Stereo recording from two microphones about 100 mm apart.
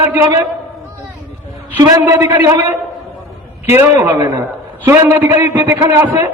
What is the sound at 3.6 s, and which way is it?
A man's voice, 25° right (ahead or behind).